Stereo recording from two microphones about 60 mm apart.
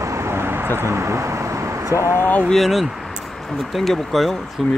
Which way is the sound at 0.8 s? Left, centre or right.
Right.